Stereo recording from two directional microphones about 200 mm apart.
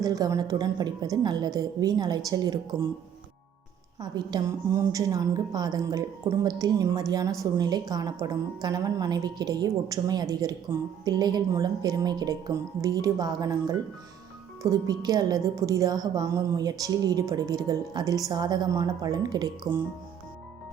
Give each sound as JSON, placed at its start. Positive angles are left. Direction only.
{"t": 0.0, "sound": "a woman's voice", "side_deg": -15}
{"t": 4.0, "sound": "a woman's voice", "side_deg": -20}